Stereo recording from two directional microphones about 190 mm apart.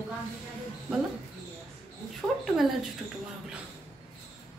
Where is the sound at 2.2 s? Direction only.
15° right (ahead or behind).